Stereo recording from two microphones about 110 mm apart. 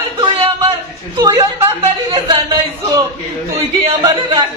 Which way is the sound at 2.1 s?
55° right (ahead or behind).